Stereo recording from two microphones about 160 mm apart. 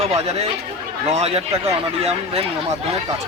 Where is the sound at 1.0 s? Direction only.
40° right (ahead or behind).